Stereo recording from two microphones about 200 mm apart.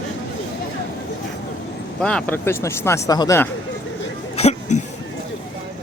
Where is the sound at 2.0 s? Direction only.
5° left (ahead or behind).